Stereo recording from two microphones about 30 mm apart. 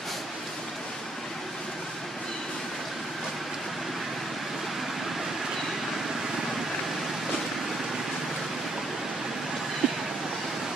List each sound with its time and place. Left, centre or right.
9.8 s vehicle: right